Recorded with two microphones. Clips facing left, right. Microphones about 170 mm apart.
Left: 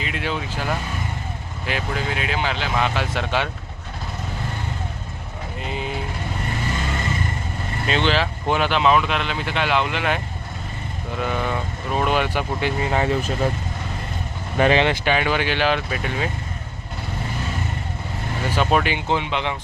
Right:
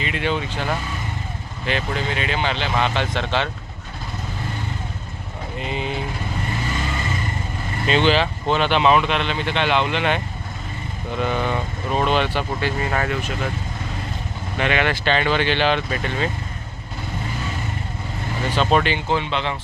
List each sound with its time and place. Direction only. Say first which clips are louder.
0.0 s speech: right 3 dB; centre (ahead or behind)
5.5 s vehicle: right 2 dB; centre (ahead or behind)
7.9 s speech: right 3 dB; centre (ahead or behind)
11.2 s speech: right 2 dB; centre (ahead or behind); by 13.1 s 20° left (ahead or behind)
14.6 s speech: left 4 dB; 35° left (ahead or behind)
14.8 s speech: even; 10° left (ahead or behind)
18.5 s speech: right 1 dB; 10° left (ahead or behind)